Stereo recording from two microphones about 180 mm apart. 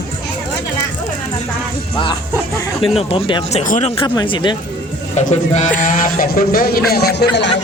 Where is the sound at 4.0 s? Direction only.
25° left (ahead or behind).